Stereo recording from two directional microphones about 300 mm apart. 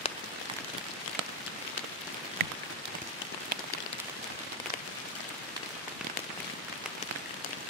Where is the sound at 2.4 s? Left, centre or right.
Right.